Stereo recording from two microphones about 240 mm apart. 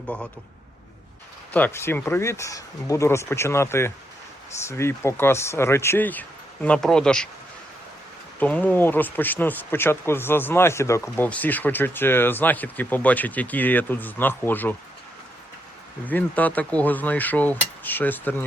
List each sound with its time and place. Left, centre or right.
1.5 s speech: centre
8.4 s speech: centre
16.0 s speech: centre